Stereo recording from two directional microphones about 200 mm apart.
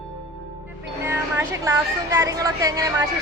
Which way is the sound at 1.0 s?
10° right (ahead or behind).